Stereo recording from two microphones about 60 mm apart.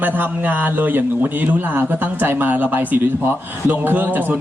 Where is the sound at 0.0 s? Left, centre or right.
Right.